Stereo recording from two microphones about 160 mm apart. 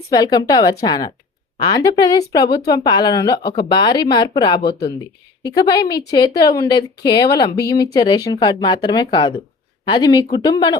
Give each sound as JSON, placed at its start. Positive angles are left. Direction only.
{"t": 0.1, "sound": "a woman's voice", "side_deg": 25}